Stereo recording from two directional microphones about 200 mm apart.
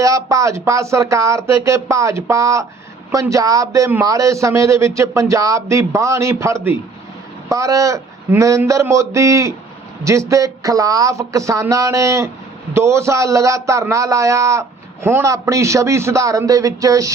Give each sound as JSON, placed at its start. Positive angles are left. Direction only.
{"t": 0.0, "sound": "a man's voice", "side_deg": -15}